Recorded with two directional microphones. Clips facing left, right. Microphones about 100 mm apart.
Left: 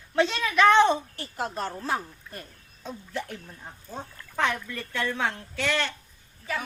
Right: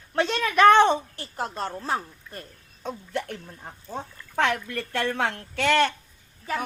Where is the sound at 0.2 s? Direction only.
50° right (ahead or behind).